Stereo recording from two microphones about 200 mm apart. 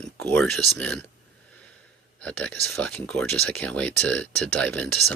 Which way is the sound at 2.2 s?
5° left (ahead or behind).